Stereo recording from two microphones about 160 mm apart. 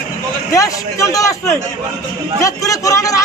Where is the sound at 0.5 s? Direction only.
20° left (ahead or behind).